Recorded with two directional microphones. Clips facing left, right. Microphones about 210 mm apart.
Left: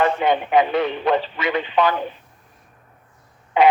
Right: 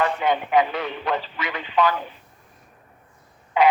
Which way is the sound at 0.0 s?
25° left (ahead or behind).